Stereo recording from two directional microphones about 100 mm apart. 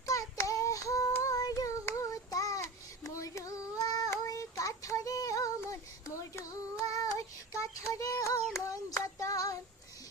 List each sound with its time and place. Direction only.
0.0 s child singing: 35° left (ahead or behind)